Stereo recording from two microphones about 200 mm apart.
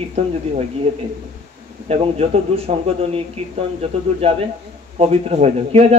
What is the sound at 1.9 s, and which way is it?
A man's voice, 30° right (ahead or behind).